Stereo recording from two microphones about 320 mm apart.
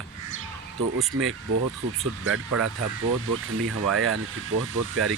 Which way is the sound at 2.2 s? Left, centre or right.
Right.